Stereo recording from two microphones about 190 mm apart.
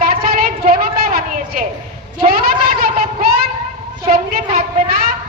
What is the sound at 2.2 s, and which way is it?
Cat, 50° right (ahead or behind).